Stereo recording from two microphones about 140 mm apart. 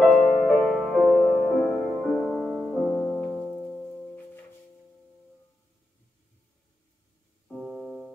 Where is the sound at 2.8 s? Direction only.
15° left (ahead or behind).